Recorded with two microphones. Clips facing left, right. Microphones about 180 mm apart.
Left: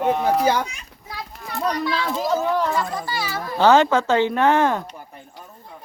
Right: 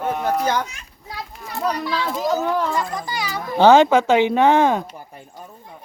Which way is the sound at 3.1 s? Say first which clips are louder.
Right 1 dB; 15° right (ahead or behind).